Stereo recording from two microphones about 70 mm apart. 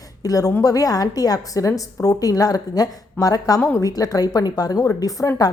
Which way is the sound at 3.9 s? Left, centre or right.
Left.